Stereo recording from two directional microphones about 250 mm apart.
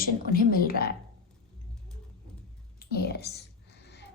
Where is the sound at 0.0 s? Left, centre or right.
Left.